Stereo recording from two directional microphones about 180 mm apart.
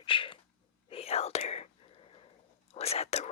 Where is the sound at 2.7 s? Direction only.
35° left (ahead or behind).